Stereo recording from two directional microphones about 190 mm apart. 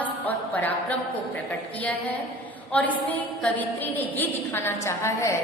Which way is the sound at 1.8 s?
10° left (ahead or behind).